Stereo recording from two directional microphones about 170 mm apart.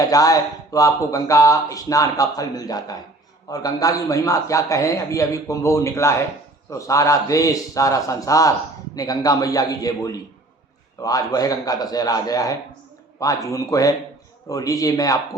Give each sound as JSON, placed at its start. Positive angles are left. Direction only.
{"t": 0.0, "sound": "speech", "side_deg": 20}